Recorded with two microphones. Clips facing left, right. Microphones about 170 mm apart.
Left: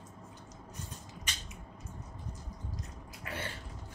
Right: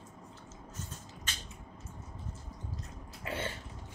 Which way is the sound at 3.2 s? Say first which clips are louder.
Right 4 dB; 25° right (ahead or behind).